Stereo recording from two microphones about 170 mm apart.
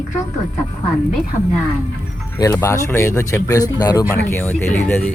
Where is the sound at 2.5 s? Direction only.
15° left (ahead or behind).